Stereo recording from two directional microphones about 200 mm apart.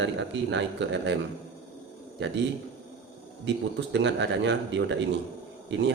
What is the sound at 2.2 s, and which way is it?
Speech, 65° right (ahead or behind).